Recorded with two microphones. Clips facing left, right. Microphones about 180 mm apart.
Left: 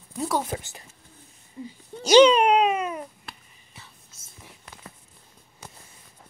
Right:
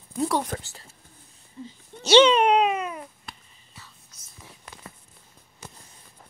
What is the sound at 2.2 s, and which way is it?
Speech, 10° left (ahead or behind).